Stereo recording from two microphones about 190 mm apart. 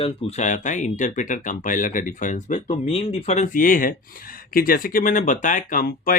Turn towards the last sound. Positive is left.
turn(degrees=50)  # may be behind; listen again after turning